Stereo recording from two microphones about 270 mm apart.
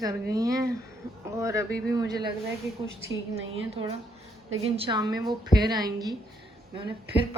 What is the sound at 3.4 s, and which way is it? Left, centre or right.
A woman's voice, right.